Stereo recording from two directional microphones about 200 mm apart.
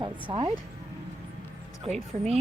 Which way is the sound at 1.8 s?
30° right (ahead or behind).